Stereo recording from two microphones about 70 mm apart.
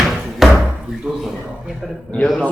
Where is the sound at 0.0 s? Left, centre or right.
Centre.